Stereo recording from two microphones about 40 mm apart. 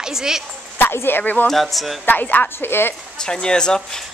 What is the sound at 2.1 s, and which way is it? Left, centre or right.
Speech, left.